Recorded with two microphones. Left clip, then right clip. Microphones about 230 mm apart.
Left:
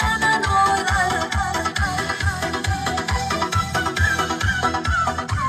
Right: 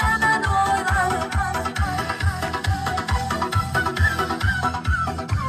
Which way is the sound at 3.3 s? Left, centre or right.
Left.